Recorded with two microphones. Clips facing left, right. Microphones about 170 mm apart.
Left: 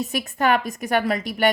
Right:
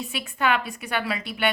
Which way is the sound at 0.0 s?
40° left (ahead or behind).